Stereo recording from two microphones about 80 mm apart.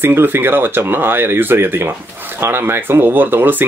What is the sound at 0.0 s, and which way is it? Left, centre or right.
Speech, right.